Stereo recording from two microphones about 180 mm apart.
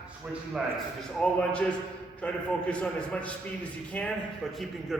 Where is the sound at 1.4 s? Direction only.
5° left (ahead or behind).